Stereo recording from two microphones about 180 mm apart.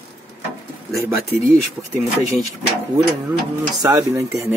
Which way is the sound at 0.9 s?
15° right (ahead or behind).